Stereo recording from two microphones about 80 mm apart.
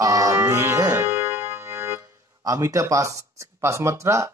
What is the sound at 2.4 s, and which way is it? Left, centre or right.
Speech, right.